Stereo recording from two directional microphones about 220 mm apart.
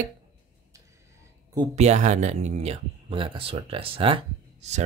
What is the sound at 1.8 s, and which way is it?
Speech, 30° right (ahead or behind).